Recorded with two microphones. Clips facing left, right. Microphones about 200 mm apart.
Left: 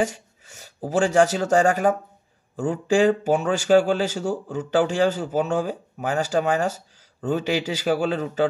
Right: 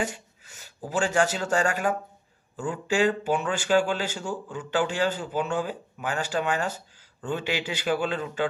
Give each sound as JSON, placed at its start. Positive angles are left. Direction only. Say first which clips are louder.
{"t": 0.0, "sound": "speech", "louder": "left 6 dB", "side_deg": 40}
{"t": 3.1, "sound": "speech", "louder": "left 6 dB", "side_deg": 40}